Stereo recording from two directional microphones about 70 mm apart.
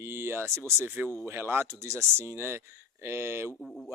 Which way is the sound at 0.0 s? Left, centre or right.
Right.